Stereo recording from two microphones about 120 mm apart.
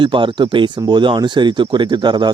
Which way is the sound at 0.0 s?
45° right (ahead or behind).